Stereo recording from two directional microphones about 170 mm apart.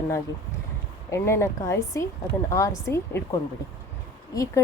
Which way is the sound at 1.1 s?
15° left (ahead or behind).